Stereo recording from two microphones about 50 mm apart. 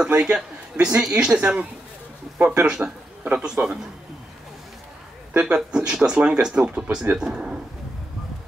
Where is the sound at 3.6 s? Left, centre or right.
Right.